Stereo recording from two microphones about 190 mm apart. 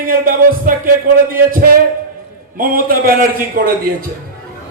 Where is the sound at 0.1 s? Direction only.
45° right (ahead or behind).